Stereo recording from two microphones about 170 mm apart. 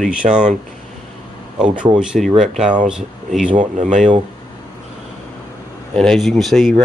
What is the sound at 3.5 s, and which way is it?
Speech, 45° right (ahead or behind).